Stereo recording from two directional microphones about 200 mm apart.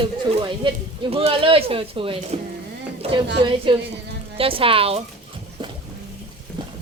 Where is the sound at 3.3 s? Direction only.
25° right (ahead or behind).